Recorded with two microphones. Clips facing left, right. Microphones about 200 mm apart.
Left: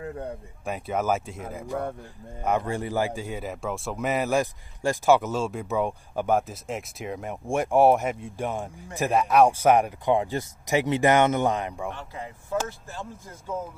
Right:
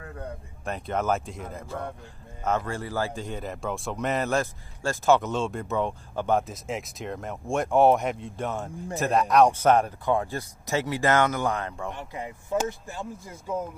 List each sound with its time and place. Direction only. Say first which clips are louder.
0.0 s a sound: left 5 dB; 25° left (ahead or behind)
0.7 s speech: left 1 dB; 10° left (ahead or behind)
11.9 s speech: right 1 dB; 15° right (ahead or behind)